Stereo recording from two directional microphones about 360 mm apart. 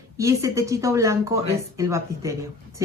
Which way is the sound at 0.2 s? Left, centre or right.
Centre.